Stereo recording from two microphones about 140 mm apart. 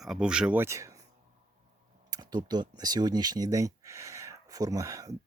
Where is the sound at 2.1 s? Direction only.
30° right (ahead or behind).